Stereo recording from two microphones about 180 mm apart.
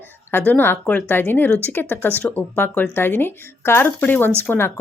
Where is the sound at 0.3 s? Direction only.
10° left (ahead or behind).